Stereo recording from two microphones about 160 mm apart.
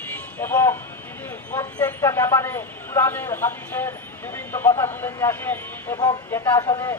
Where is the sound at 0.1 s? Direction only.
15° left (ahead or behind).